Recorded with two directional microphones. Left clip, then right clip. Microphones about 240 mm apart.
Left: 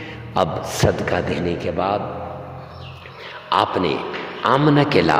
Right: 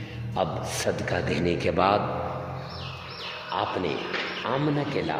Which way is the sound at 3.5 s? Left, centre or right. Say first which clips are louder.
Left 10 dB; left.